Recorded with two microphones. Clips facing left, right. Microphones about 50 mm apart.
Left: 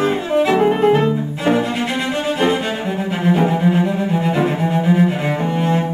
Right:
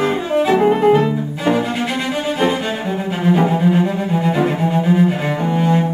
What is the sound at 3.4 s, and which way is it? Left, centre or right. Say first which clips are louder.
Cello: right 1 dB; centre.